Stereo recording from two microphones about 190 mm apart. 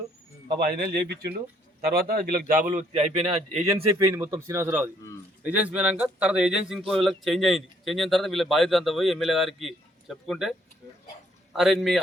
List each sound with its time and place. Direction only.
0.6 s speech: 55° right (ahead or behind); by 3.7 s 30° right (ahead or behind)
3.8 s speech: 15° right (ahead or behind)
11.5 s speech: centre (ahead or behind)